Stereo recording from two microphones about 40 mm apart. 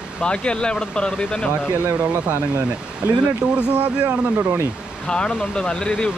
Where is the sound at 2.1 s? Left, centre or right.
Right.